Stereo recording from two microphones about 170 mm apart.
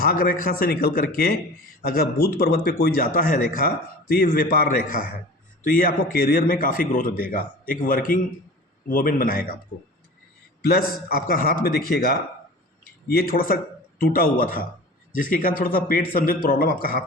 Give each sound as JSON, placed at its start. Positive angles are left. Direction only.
{"t": 0.0, "sound": "speech", "side_deg": 60}
{"t": 10.6, "sound": "speech", "side_deg": 65}